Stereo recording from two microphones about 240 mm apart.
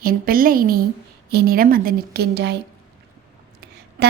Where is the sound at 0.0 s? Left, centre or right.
Right.